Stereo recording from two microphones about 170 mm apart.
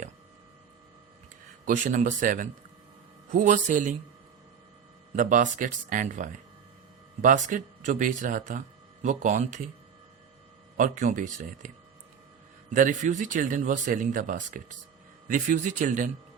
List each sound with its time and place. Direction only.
1.6 s speech: 45° right (ahead or behind)
5.1 s speech: 50° right (ahead or behind)
10.8 s speech: 50° right (ahead or behind)
12.7 s speech: 50° right (ahead or behind)